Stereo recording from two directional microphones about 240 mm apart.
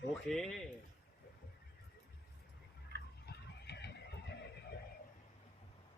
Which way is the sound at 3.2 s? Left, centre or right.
Left.